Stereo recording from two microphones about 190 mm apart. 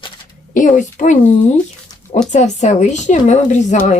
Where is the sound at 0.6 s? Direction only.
40° left (ahead or behind).